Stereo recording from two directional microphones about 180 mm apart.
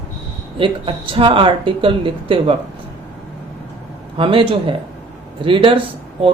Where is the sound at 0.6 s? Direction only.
30° right (ahead or behind).